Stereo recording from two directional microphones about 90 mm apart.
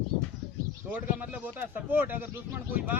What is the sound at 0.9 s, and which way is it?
A man's voice, 15° right (ahead or behind).